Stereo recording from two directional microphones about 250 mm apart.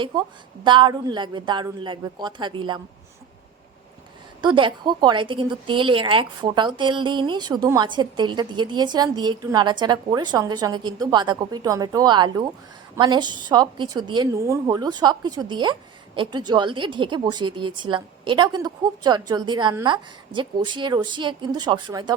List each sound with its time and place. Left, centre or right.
0.0 s a woman's voice: centre
4.4 s a woman's voice: centre